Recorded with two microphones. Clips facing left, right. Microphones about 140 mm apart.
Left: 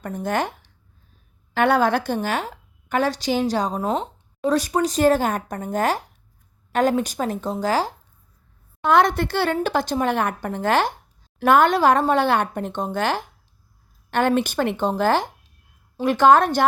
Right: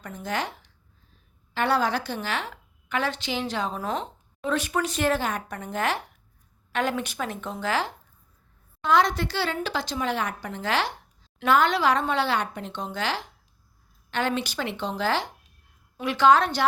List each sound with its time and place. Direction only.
0.0 s a woman's voice: 50° left (ahead or behind)
8.8 s a woman's voice: 55° left (ahead or behind)